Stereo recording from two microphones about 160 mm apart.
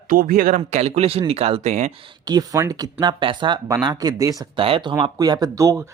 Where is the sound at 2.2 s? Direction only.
25° right (ahead or behind).